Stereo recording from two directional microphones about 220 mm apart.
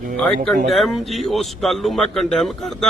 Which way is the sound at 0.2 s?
Centre (ahead or behind).